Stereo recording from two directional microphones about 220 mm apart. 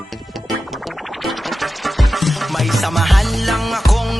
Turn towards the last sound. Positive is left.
turn(degrees=0)  # may be behind; listen again after turning